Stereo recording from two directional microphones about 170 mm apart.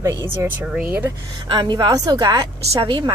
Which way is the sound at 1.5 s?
25° right (ahead or behind).